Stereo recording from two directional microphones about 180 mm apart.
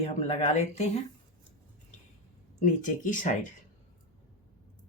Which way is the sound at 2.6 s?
45° left (ahead or behind).